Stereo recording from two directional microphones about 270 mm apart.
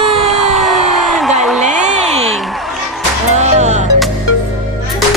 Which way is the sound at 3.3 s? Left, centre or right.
Right.